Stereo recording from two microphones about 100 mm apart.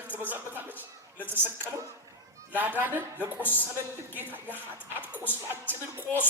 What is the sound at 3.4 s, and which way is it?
Speech, 20° left (ahead or behind).